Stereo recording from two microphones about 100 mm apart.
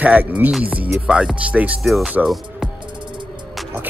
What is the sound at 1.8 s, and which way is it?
Speech, centre (ahead or behind).